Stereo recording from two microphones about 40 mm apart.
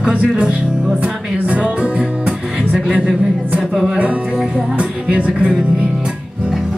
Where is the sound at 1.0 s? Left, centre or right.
Right.